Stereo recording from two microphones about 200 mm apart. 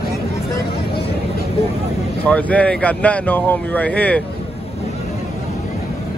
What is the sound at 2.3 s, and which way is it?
Speech, 5° left (ahead or behind).